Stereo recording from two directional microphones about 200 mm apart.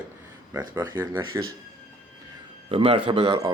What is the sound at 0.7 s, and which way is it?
Speech, 10° right (ahead or behind).